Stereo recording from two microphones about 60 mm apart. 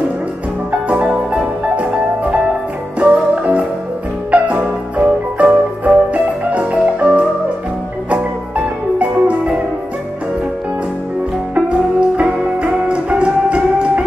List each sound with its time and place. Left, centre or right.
0.7 s music: right
11.5 s music: right